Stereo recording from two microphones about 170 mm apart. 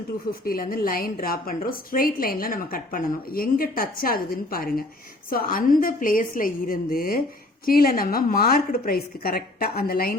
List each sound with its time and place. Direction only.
0.3 s a woman's voice: 60° left (ahead or behind)